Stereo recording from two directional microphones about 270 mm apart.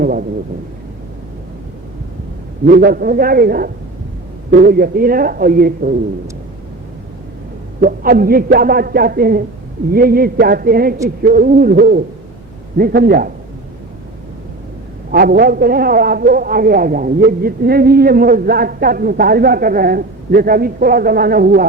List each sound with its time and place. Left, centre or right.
0.0 s a man's voice: right
2.6 s a man's voice: right
7.8 s a man's voice: right
15.1 s a man's voice: right